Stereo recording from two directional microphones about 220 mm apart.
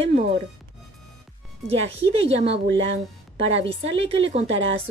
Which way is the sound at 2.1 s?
30° right (ahead or behind).